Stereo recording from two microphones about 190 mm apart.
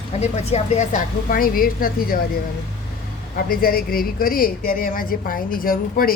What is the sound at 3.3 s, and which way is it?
A woman's voice, 50° left (ahead or behind).